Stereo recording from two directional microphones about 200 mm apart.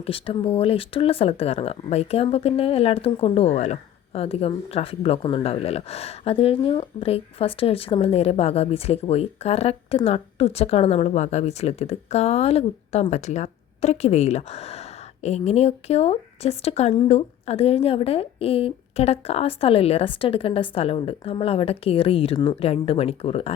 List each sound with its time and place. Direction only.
0.0 s speech: 30° left (ahead or behind)